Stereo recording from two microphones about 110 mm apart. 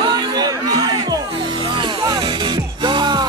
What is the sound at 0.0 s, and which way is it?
Music, 40° right (ahead or behind).